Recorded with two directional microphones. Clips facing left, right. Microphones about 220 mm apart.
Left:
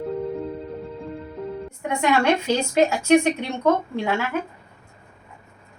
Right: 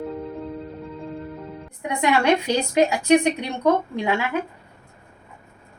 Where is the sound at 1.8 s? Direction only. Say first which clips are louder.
Even; 15° right (ahead or behind).